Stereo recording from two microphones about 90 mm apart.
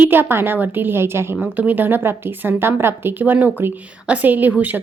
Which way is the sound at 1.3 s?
15° right (ahead or behind).